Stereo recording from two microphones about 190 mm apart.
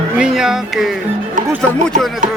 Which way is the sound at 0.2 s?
5° right (ahead or behind).